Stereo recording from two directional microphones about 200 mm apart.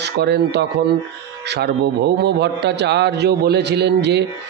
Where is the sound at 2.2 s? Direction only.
55° right (ahead or behind).